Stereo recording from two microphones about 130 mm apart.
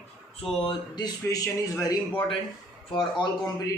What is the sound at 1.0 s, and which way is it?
Speech, 25° left (ahead or behind).